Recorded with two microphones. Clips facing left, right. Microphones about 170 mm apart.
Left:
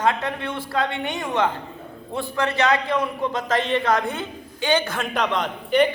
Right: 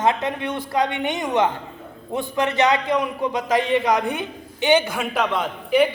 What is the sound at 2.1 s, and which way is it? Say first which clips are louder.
A man's voice: right 2 dB; 20° right (ahead or behind).